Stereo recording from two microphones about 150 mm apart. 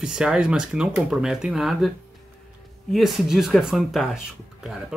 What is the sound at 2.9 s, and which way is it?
Speech, 5° right (ahead or behind).